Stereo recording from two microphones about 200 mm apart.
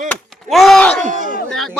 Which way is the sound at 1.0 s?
40° right (ahead or behind).